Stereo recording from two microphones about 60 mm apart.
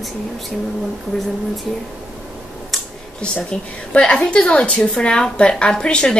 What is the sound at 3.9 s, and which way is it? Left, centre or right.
A woman's voice, centre.